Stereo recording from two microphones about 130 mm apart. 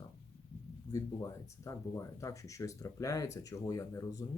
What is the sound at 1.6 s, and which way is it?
Speech, 25° left (ahead or behind).